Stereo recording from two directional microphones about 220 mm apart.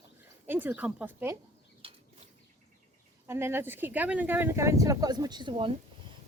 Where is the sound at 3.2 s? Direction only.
10° right (ahead or behind).